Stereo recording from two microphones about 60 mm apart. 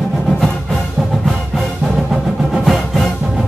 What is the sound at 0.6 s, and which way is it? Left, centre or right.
Music, centre.